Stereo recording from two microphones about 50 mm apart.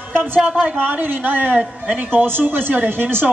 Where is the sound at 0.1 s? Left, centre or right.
Right.